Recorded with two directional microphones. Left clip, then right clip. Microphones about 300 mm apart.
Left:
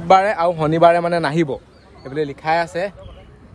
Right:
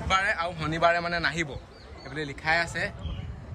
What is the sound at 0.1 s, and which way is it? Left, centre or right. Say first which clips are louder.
A man's voice: left 12 dB; centre.